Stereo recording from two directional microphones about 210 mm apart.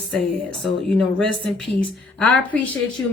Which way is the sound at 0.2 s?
Centre (ahead or behind).